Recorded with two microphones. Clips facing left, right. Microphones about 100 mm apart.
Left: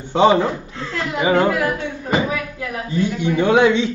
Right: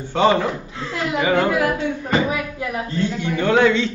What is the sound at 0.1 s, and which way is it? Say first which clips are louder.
A man's voice: left 3 dB; 15° left (ahead or behind).